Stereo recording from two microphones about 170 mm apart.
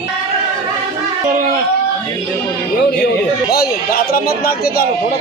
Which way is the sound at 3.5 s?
60° left (ahead or behind).